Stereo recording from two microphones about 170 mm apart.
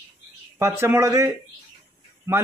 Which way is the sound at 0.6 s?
15° right (ahead or behind).